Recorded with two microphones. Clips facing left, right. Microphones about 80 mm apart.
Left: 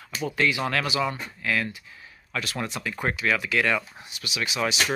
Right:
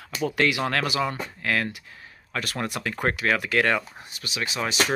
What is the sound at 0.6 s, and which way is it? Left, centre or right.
Speech, right.